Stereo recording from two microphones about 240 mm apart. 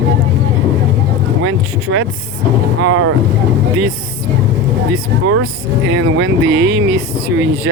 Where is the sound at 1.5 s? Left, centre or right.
Right.